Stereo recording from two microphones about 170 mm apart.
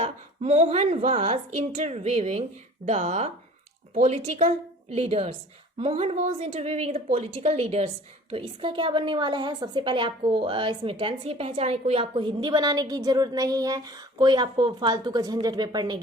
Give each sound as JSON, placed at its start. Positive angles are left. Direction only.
{"t": 0.0, "sound": "a woman's voice", "side_deg": -40}